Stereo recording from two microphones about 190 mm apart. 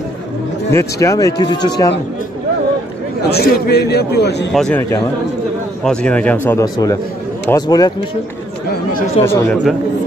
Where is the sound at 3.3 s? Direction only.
60° left (ahead or behind).